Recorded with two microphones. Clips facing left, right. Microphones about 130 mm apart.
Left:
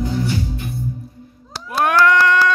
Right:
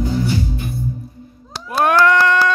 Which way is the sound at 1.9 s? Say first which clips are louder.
Even; 30° right (ahead or behind).